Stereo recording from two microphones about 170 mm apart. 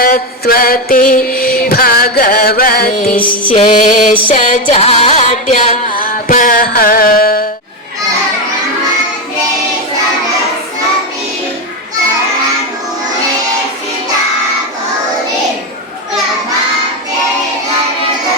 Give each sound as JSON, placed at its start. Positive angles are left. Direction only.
{"t": 0.0, "sound": "music", "side_deg": 60}
{"t": 3.2, "sound": "music", "side_deg": 50}